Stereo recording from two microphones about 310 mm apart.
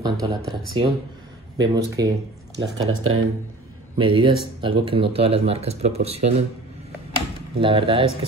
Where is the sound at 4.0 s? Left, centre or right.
Centre.